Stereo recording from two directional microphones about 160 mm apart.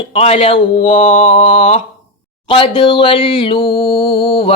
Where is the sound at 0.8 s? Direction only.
50° left (ahead or behind).